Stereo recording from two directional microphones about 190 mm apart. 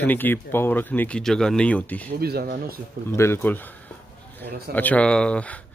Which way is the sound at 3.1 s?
15° left (ahead or behind).